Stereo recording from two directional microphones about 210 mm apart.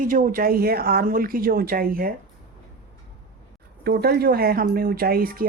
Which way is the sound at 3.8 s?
50° right (ahead or behind).